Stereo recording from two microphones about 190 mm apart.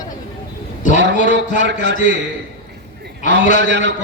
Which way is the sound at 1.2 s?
65° right (ahead or behind).